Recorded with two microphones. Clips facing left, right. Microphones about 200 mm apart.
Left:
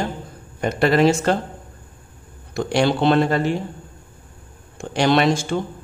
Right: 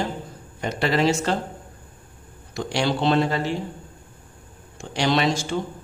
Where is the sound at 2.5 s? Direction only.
55° left (ahead or behind).